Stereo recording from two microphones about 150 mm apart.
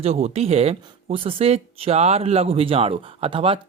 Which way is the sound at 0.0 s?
45° right (ahead or behind).